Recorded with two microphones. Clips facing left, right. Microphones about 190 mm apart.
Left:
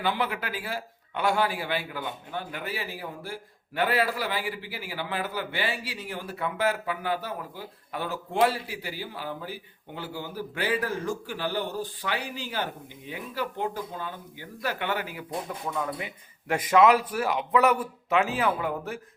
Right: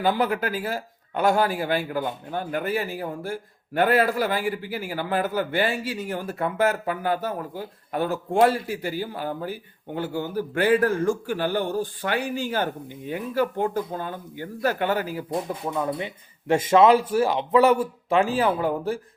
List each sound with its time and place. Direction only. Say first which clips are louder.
0.0 s speech: right 6 dB; 40° right (ahead or behind)
15.6 s speech: right 5 dB; 30° right (ahead or behind)